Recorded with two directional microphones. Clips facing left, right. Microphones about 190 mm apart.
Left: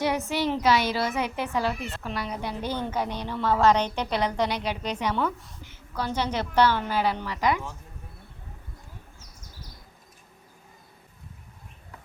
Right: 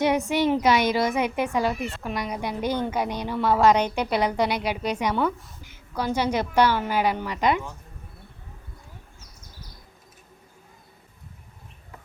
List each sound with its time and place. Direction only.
0.0 s a woman's voice: 15° right (ahead or behind)